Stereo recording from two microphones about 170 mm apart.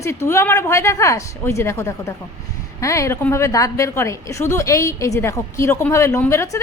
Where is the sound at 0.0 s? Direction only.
15° left (ahead or behind).